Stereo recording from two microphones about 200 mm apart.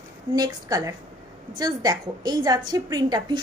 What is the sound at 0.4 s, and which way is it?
A woman's voice, 20° right (ahead or behind).